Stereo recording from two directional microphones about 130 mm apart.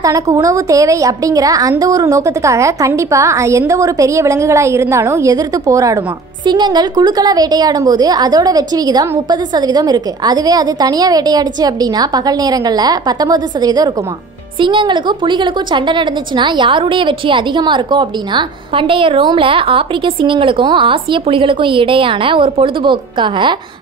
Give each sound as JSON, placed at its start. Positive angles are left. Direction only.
{"t": 0.0, "sound": "a woman's voice", "side_deg": -25}